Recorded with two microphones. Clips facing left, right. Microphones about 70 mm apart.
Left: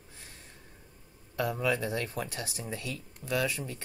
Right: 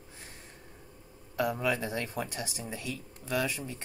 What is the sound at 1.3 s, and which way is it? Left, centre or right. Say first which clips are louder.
Speech: even; centre.